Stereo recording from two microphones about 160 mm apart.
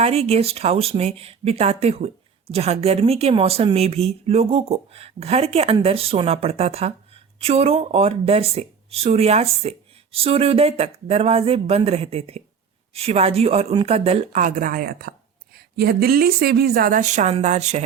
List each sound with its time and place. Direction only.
0.0 s speech: 40° right (ahead or behind)